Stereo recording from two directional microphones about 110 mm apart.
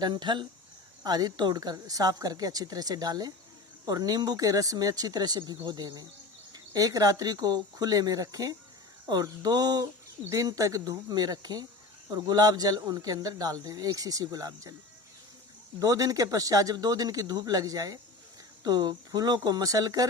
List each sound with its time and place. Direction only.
0.0 s speech: 40° right (ahead or behind)
15.8 s speech: 30° right (ahead or behind)